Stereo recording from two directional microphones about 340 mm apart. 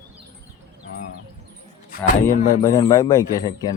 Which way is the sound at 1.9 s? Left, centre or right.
Left.